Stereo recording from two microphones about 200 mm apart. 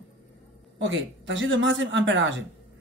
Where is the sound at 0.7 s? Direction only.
70° right (ahead or behind).